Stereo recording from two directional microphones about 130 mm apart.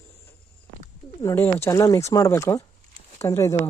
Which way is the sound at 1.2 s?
20° left (ahead or behind).